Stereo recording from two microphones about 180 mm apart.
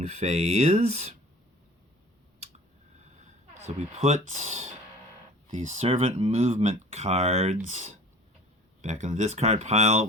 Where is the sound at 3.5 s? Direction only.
40° right (ahead or behind).